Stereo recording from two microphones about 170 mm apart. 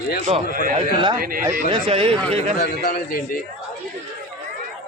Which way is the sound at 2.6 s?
60° left (ahead or behind).